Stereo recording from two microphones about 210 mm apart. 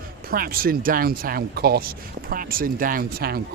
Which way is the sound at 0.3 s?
45° right (ahead or behind).